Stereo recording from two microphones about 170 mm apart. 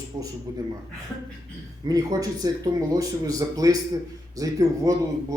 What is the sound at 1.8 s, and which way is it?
Speech, 20° right (ahead or behind).